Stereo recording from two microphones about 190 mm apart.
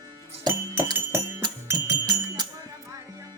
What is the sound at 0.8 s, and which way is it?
Music, 10° right (ahead or behind).